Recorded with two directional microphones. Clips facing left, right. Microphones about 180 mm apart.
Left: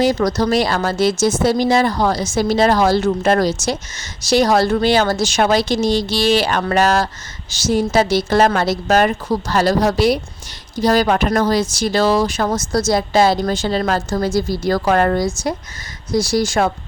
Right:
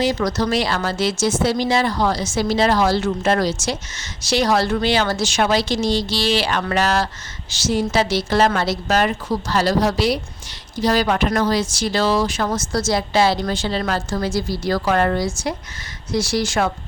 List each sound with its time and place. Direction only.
0.0 s speech: 40° left (ahead or behind)